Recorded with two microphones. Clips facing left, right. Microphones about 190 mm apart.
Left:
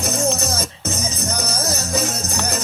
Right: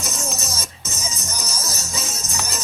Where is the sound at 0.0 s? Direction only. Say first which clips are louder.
Left 9 dB; 60° left (ahead or behind).